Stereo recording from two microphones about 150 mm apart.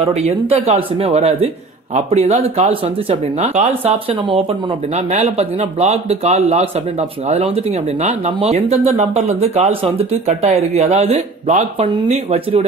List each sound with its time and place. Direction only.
0.0 s speech: 45° right (ahead or behind)